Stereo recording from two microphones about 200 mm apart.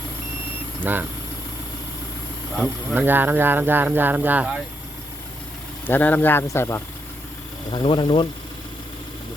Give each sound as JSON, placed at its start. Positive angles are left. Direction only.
{"t": 0.9, "sound": "speech", "side_deg": -10}
{"t": 2.6, "sound": "speech", "side_deg": -10}
{"t": 5.8, "sound": "speech", "side_deg": 10}
{"t": 7.7, "sound": "speech", "side_deg": 25}